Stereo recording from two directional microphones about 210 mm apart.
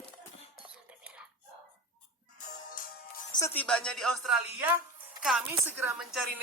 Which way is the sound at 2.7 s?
40° left (ahead or behind).